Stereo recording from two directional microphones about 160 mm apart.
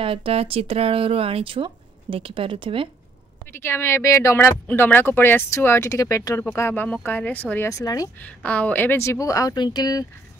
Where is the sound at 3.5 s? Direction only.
15° left (ahead or behind).